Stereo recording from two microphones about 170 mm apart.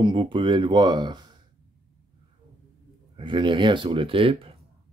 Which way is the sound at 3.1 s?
30° right (ahead or behind).